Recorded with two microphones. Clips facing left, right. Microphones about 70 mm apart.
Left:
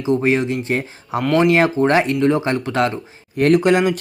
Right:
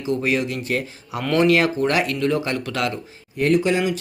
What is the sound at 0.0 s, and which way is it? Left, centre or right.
Speech, left.